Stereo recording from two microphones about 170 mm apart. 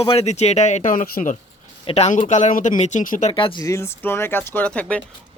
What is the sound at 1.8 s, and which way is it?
Speech, 40° left (ahead or behind).